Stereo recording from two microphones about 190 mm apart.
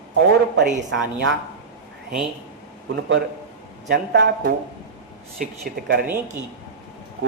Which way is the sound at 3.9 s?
60° right (ahead or behind).